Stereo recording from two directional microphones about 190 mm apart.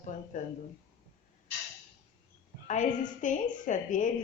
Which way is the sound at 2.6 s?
40° left (ahead or behind).